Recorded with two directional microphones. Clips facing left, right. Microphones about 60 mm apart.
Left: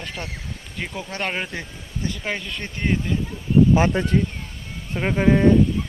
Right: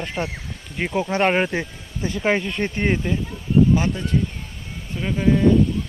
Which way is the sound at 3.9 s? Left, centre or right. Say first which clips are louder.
Left 3 dB; left.